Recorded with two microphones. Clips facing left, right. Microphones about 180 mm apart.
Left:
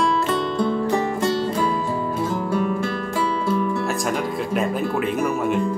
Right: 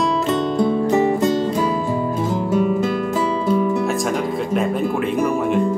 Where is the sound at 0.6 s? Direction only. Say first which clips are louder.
Right 6 dB; 20° right (ahead or behind).